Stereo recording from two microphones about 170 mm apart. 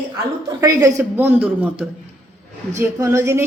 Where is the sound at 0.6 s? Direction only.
20° right (ahead or behind).